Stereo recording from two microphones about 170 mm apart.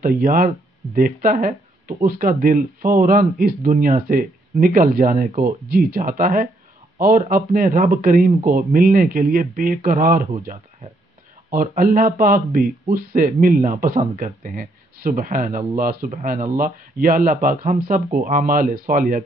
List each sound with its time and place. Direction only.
0.0 s speech: 55° right (ahead or behind)